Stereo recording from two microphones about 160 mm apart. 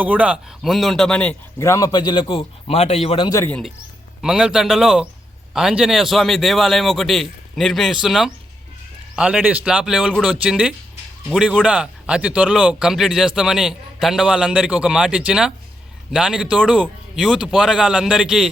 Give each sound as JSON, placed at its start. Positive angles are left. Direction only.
{"t": 0.0, "sound": "a man's voice", "side_deg": -10}
{"t": 3.2, "sound": "a man's voice", "side_deg": 20}
{"t": 4.2, "sound": "speech", "side_deg": -5}